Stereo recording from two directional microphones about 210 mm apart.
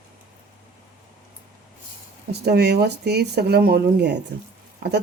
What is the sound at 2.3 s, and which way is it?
A woman's voice, 50° right (ahead or behind).